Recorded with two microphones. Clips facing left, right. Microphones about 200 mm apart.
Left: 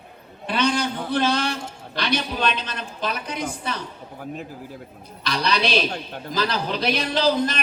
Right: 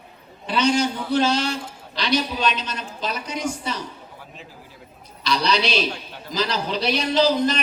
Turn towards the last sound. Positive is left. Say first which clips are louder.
# right 2 dB
turn(degrees=55)  # may be behind; listen again after turning